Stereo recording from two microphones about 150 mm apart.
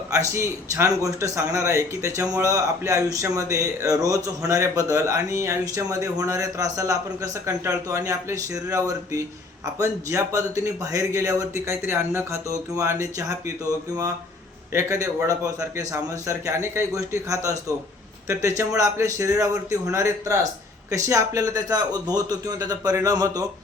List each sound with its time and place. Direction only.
0.1 s a man's voice: 20° right (ahead or behind)
14.7 s a man's voice: 20° right (ahead or behind)